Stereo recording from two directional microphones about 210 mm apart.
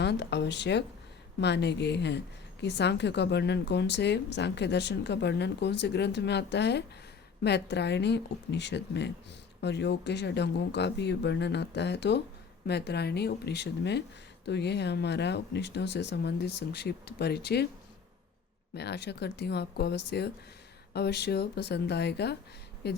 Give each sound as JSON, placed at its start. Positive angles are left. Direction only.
{"t": 0.0, "sound": "a woman's voice", "side_deg": 55}
{"t": 18.7, "sound": "speech", "side_deg": 55}